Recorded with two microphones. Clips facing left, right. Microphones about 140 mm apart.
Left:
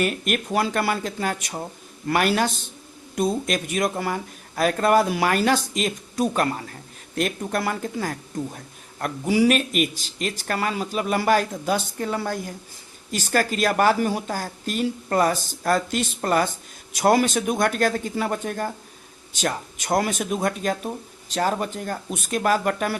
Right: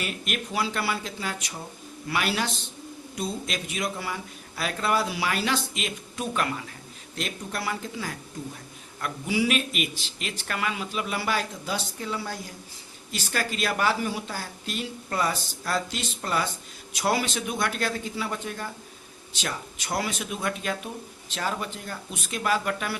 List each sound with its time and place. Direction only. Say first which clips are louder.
0.0 s speech: left 8 dB; 50° left (ahead or behind)
7.2 s speech: left 8 dB; 50° left (ahead or behind)